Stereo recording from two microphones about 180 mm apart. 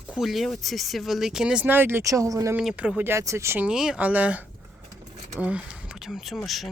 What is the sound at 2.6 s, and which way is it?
Speech, 5° right (ahead or behind).